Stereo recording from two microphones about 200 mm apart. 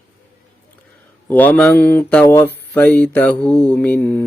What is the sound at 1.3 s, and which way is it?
Mantra, 10° left (ahead or behind).